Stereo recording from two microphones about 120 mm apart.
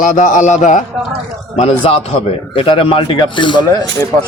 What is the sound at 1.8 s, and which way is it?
A man's voice, 50° left (ahead or behind).